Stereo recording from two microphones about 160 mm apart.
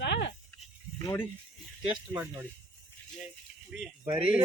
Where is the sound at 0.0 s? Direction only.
90° left.